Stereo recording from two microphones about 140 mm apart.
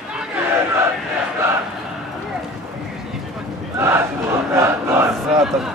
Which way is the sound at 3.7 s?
20° right (ahead or behind).